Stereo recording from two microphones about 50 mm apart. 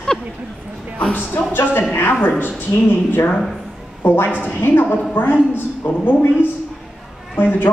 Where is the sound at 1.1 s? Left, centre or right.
Left.